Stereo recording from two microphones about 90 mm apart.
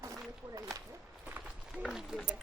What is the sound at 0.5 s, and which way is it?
Speech, 40° right (ahead or behind).